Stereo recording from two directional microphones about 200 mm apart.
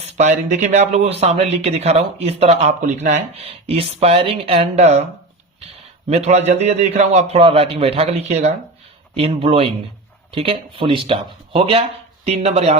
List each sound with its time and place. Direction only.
0.0 s speech: 35° right (ahead or behind)
6.1 s speech: 35° right (ahead or behind)